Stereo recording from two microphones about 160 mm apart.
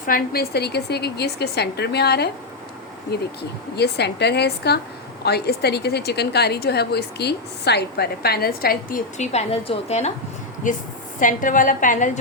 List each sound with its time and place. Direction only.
0.0 s a woman's voice: 70° left (ahead or behind)
9.1 s a woman's voice: 45° left (ahead or behind)
10.6 s a woman's voice: 55° left (ahead or behind)